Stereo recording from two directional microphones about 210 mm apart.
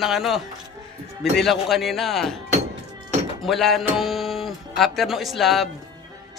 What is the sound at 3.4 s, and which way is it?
Speech, centre (ahead or behind).